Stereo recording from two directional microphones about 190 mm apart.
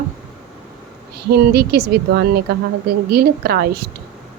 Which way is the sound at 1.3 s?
55° right (ahead or behind).